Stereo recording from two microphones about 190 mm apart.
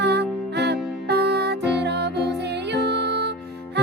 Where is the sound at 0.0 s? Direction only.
60° right (ahead or behind).